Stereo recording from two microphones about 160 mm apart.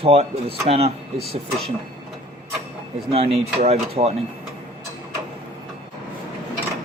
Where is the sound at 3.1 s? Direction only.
35° right (ahead or behind).